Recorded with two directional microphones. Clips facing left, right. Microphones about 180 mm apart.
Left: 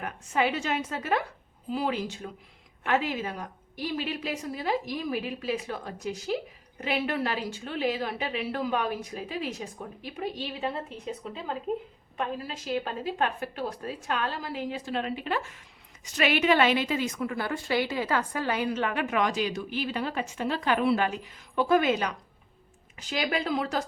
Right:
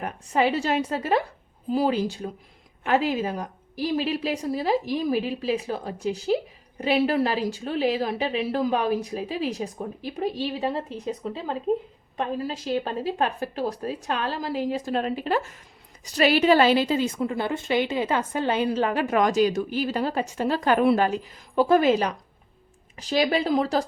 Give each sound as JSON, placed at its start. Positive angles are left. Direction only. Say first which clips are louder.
{"t": 0.0, "sound": "a woman's voice", "louder": "right 4 dB", "side_deg": -35}